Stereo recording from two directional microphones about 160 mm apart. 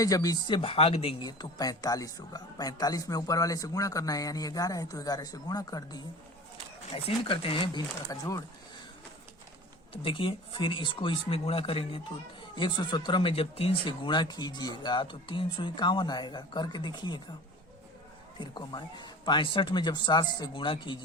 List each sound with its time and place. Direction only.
0.0 s speech: 20° left (ahead or behind)
6.9 s speech: 35° left (ahead or behind)
9.9 s speech: 35° left (ahead or behind)
18.3 s speech: 30° left (ahead or behind)